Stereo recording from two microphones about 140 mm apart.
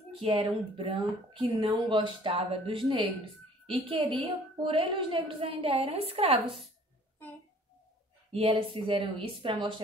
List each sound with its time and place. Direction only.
0.4 s a woman's voice: 40° right (ahead or behind)
8.3 s a woman's voice: 40° right (ahead or behind)